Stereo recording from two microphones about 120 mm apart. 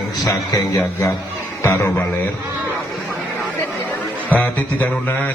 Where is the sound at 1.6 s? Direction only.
20° left (ahead or behind).